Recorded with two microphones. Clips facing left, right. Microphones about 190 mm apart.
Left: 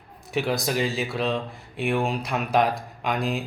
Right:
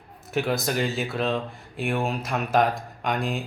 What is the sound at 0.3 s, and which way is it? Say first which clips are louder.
Speech: even; centre (ahead or behind).